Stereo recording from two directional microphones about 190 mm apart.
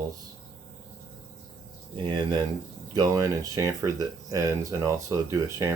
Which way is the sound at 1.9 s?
25° right (ahead or behind).